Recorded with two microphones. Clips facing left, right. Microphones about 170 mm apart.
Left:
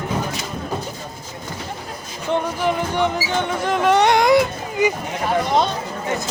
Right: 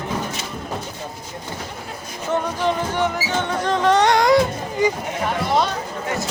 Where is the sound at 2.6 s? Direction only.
15° left (ahead or behind).